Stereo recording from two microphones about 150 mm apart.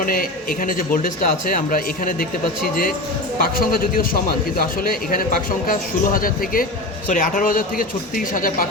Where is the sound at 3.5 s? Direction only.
75° left (ahead or behind).